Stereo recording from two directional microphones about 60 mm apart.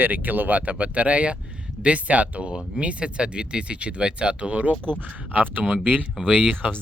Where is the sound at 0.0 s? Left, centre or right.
Right.